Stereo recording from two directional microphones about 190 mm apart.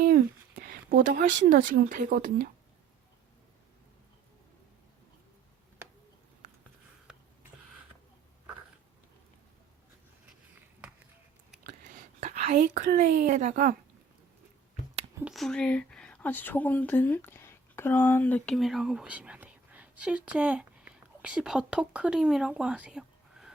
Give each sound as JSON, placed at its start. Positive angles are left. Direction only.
{"t": 0.6, "sound": "speech", "side_deg": -50}
{"t": 11.7, "sound": "whispering", "side_deg": -45}
{"t": 12.8, "sound": "a woman's voice", "side_deg": -45}
{"t": 15.3, "sound": "speech", "side_deg": 0}